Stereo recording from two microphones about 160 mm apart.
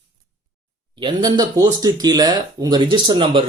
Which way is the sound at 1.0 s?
25° right (ahead or behind).